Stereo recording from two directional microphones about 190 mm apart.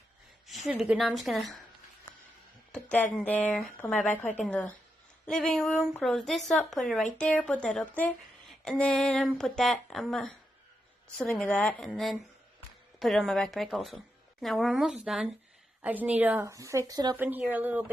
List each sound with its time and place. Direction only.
0.7 s speech: centre (ahead or behind)
2.7 s a sound: 5° left (ahead or behind)
3.2 s a woman's voice: 10° left (ahead or behind); by 17.2 s 20° right (ahead or behind)
17.2 s a woman's voice: 10° right (ahead or behind)